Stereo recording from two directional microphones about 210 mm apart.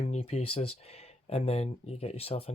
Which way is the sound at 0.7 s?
30° left (ahead or behind).